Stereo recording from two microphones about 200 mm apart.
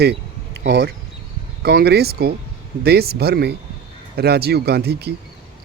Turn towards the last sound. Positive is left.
turn(degrees=-55)  # may be behind; listen again after turning